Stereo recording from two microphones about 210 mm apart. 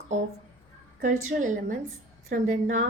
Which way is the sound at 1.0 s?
40° right (ahead or behind).